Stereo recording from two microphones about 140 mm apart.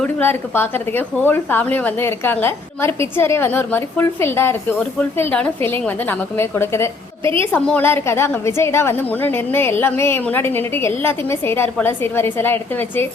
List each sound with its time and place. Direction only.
0.0 s a woman's voice: 15° left (ahead or behind)